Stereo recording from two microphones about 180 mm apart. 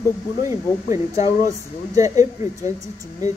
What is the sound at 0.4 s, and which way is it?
Speech, 15° right (ahead or behind).